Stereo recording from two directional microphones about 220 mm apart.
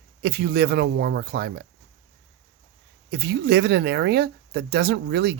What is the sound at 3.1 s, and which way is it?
Speech, 50° right (ahead or behind).